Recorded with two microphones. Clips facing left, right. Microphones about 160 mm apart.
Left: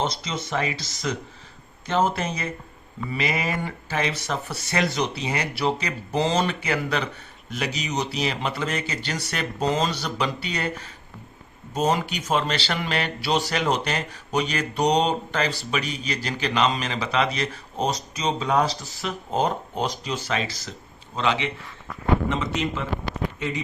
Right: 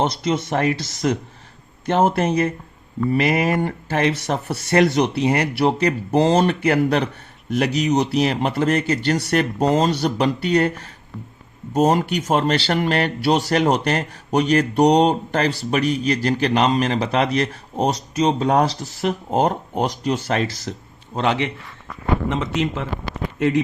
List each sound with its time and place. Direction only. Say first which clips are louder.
0.0 s a man's voice: right 7 dB; 60° right (ahead or behind)